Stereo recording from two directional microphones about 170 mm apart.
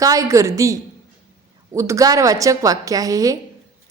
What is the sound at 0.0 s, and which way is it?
A woman's voice, 20° right (ahead or behind).